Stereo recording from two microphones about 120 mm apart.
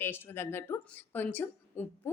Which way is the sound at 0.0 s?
20° left (ahead or behind).